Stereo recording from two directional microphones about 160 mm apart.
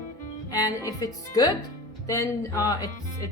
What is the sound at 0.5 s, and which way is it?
Speech, 20° left (ahead or behind).